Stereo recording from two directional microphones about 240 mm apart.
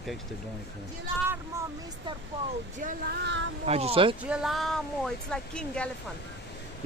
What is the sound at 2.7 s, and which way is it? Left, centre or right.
Speech, right.